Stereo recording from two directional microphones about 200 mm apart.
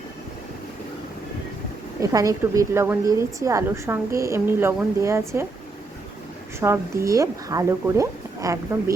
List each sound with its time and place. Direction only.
2.0 s a woman's voice: 15° right (ahead or behind)
6.6 s a woman's voice: 15° right (ahead or behind)